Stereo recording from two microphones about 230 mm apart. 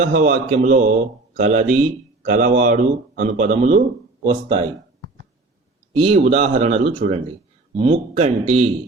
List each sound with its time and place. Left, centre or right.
0.0 s speech: right
4.2 s speech: right
6.0 s speech: right